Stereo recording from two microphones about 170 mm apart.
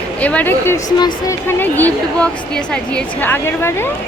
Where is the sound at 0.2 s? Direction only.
10° left (ahead or behind).